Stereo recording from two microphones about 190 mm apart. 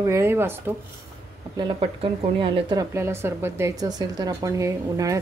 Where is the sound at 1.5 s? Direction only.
25° right (ahead or behind).